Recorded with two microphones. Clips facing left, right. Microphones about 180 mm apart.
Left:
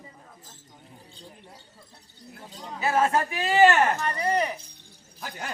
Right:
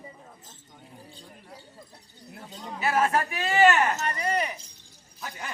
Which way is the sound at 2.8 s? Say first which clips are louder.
Left 1 dB; 25° left (ahead or behind).